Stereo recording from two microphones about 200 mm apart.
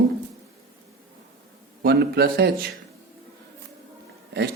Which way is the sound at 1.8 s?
50° right (ahead or behind).